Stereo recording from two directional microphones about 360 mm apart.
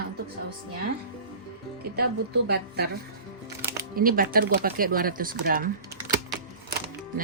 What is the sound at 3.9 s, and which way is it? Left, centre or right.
Speech, right.